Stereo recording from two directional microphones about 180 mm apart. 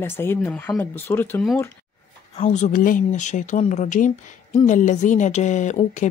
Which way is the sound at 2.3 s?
40° left (ahead or behind).